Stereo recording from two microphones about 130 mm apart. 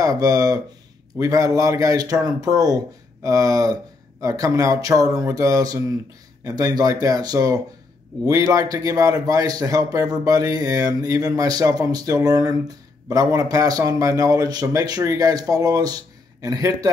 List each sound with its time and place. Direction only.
0.0 s a man's voice: 25° right (ahead or behind)